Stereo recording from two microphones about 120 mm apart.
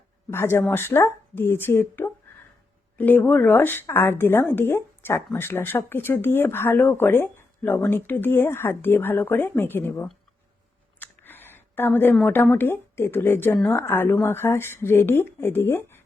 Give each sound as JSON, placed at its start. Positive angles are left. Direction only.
{"t": 0.3, "sound": "a woman's voice", "side_deg": 20}
{"t": 11.0, "sound": "a sound", "side_deg": 15}
{"t": 12.2, "sound": "a woman's voice", "side_deg": 15}